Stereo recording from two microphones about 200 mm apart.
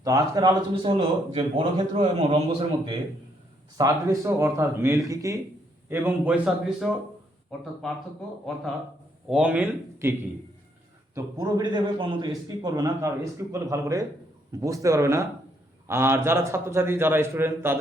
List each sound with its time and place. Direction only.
0.0 s a man's voice: 15° right (ahead or behind); by 7.9 s centre (ahead or behind)
9.3 s a man's voice: 5° right (ahead or behind)